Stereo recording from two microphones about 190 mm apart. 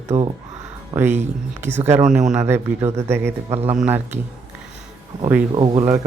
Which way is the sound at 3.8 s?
10° right (ahead or behind).